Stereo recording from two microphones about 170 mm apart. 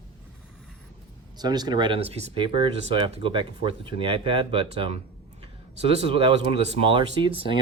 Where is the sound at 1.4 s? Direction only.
25° right (ahead or behind).